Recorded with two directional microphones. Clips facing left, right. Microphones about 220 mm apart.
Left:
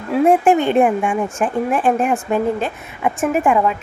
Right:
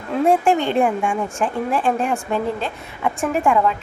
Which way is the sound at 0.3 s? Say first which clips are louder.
Left 3 dB; 20° left (ahead or behind).